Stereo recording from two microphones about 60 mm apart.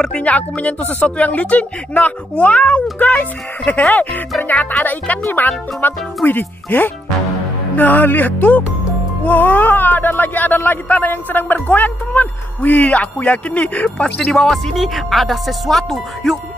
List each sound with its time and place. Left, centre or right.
0.2 s speech: left; by 16.3 s centre